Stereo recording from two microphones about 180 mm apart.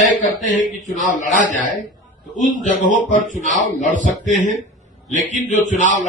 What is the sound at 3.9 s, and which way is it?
Speech, 45° right (ahead or behind).